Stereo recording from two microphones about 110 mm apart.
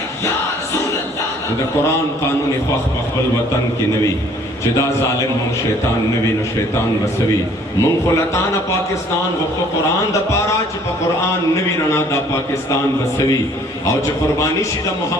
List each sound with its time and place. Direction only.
7.8 s a man's voice: 25° left (ahead or behind)
11.2 s a man's voice: 25° left (ahead or behind)